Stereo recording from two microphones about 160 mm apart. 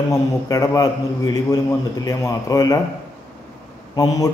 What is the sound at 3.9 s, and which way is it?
Speech, 25° left (ahead or behind).